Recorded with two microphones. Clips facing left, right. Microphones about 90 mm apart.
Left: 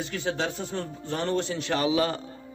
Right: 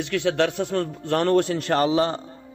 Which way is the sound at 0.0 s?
75° right (ahead or behind).